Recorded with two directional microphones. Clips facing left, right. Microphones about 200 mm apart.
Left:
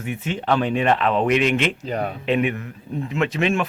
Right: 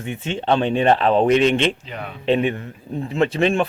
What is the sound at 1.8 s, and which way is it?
Speech, 40° left (ahead or behind).